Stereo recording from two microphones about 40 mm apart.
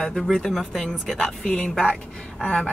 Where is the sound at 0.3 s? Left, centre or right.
Centre.